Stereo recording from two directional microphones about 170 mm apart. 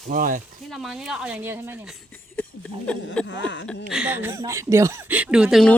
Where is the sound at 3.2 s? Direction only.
90° left.